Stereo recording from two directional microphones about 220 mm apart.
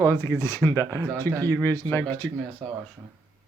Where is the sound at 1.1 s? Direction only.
15° right (ahead or behind).